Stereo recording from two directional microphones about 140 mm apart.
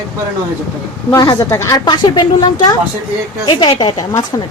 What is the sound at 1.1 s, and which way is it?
Speech, 25° left (ahead or behind).